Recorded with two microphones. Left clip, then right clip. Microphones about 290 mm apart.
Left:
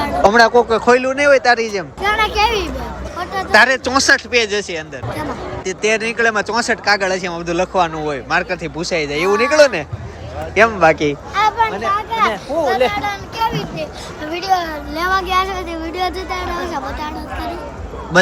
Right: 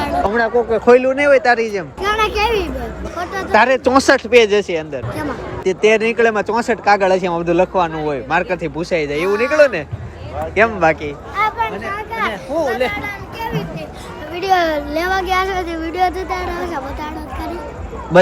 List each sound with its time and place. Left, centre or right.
0.2 s speech: centre
11.1 s a sound: left
11.5 s speech: centre
12.6 s speech: centre
14.9 s speech: centre